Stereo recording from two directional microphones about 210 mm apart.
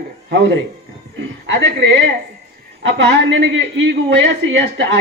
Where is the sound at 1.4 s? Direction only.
55° right (ahead or behind).